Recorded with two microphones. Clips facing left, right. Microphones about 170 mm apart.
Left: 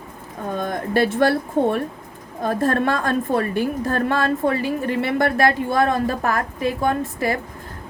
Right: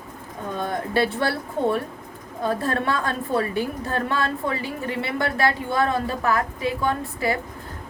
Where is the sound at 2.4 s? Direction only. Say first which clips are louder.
Left 4 dB; 45° left (ahead or behind).